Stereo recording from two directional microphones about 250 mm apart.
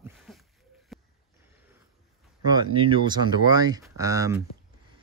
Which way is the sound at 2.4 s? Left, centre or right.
Centre.